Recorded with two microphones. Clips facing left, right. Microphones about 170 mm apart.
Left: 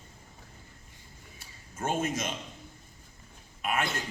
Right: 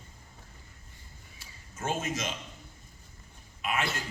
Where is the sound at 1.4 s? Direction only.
55° left (ahead or behind).